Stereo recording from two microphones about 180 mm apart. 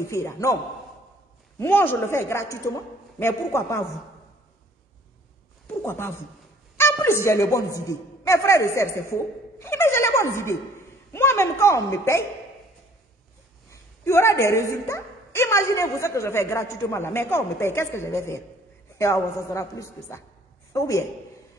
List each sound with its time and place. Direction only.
0.0 s a woman's voice: 15° left (ahead or behind)
1.6 s a woman's voice: 10° left (ahead or behind)
5.7 s a woman's voice: 10° left (ahead or behind)
13.7 s a woman's voice: 15° left (ahead or behind)